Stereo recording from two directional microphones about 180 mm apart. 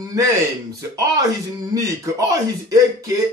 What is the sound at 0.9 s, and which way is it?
Speech, 20° right (ahead or behind).